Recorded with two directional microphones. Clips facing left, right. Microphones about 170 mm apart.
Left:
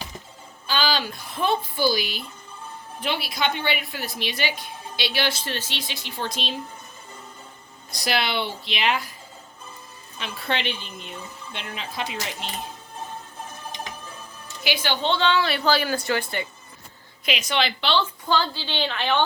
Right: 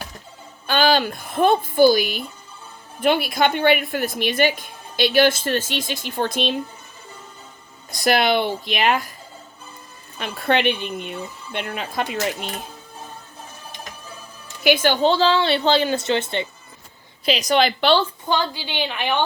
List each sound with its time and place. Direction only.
0.7 s a woman's voice: 55° right (ahead or behind)
7.9 s a woman's voice: 50° right (ahead or behind)
10.2 s a woman's voice: 50° right (ahead or behind)
14.6 s a woman's voice: 50° right (ahead or behind); by 16.5 s 25° right (ahead or behind)
17.2 s a woman's voice: 35° right (ahead or behind)
18.3 s a woman's voice: 15° right (ahead or behind)